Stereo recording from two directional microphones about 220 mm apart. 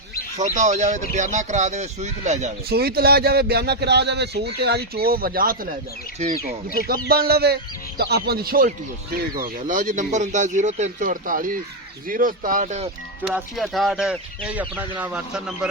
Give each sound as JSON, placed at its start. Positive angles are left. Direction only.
{"t": 0.3, "sound": "speech", "side_deg": -30}
{"t": 2.6, "sound": "speech", "side_deg": -45}
{"t": 6.7, "sound": "speech", "side_deg": -45}
{"t": 13.2, "sound": "speech", "side_deg": -5}